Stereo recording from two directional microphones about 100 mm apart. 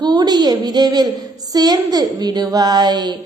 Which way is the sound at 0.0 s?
45° right (ahead or behind).